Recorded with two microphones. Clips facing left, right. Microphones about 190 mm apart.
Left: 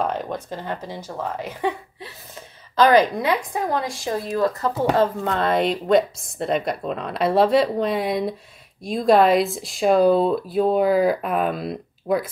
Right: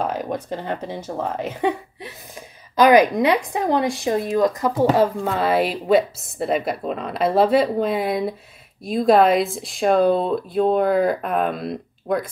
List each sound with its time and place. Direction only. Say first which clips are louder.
0.0 s speech: right 1 dB; 5° right (ahead or behind)